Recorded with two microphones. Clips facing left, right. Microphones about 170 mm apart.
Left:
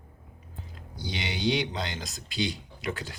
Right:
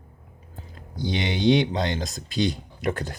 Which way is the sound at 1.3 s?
50° right (ahead or behind).